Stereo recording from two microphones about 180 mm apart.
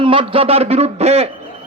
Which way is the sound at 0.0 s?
30° right (ahead or behind).